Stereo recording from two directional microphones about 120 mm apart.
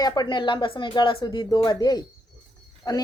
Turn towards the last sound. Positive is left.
turn(degrees=30)  # may be behind; listen again after turning